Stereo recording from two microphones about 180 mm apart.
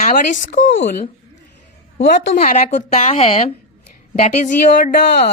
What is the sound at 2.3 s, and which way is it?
A woman's voice, 40° left (ahead or behind).